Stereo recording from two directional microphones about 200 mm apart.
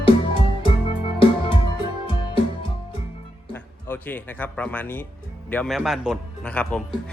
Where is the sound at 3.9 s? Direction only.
10° left (ahead or behind).